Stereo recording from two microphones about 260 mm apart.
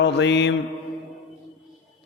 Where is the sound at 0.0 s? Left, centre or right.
Left.